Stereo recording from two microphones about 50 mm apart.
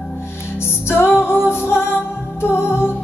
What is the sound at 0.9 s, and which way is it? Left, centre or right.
Music, left.